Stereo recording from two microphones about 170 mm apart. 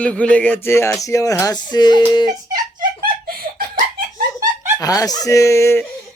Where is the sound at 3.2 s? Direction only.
60° right (ahead or behind).